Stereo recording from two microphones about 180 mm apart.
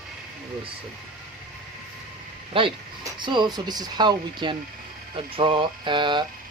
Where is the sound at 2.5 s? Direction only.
30° right (ahead or behind).